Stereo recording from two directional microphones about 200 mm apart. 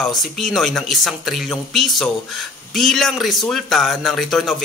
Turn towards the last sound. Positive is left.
turn(degrees=0)  # may be behind; listen again after turning